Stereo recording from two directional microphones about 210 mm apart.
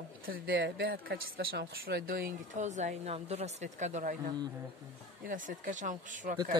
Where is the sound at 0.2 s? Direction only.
45° right (ahead or behind).